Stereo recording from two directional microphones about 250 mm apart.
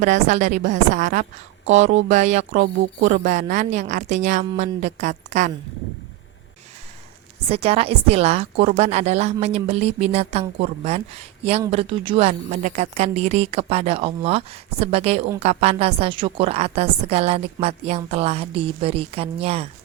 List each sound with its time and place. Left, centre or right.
0.0 s a woman's voice: right
7.5 s a woman's voice: right